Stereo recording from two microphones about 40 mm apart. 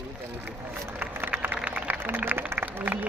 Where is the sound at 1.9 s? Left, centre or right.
Right.